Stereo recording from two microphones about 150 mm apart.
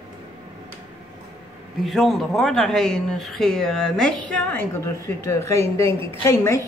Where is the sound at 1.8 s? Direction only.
Centre (ahead or behind).